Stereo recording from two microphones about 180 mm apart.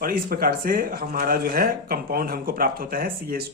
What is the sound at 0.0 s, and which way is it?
Speech, 55° right (ahead or behind).